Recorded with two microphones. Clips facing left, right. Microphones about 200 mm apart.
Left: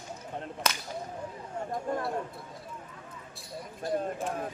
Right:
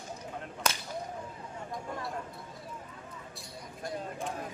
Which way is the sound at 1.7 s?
55° left (ahead or behind).